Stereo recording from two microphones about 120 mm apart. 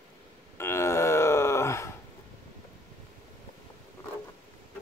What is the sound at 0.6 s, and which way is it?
Groan, 20° left (ahead or behind).